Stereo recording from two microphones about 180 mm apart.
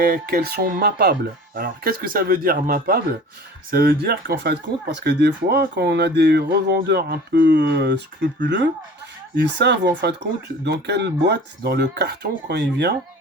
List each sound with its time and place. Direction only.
0.0 s speech: 55° right (ahead or behind)